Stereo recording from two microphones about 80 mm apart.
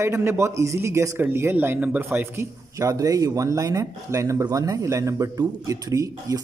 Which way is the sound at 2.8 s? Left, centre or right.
Right.